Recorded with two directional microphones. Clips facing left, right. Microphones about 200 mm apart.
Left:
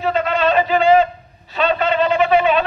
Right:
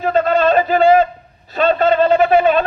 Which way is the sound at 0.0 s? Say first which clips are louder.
Right 4 dB; 45° right (ahead or behind).